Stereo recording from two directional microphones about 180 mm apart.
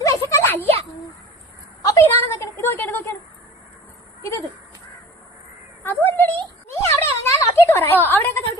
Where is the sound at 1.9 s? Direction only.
15° left (ahead or behind).